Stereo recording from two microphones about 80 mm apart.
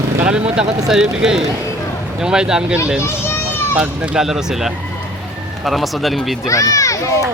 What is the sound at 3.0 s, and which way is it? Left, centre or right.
Children playing, left.